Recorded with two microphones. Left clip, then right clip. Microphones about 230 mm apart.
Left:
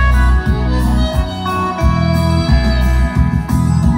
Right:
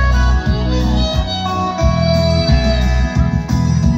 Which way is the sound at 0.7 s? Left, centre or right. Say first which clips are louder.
Right 2 dB; right.